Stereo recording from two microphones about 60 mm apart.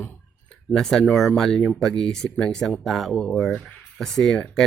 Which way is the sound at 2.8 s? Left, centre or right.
Centre.